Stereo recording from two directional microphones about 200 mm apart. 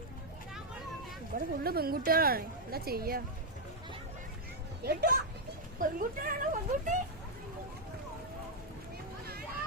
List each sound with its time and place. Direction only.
1.3 s a woman's voice: 50° right (ahead or behind)
4.8 s a woman's voice: 50° right (ahead or behind)